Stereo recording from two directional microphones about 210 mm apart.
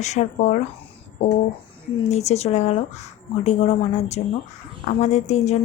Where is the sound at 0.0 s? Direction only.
35° left (ahead or behind).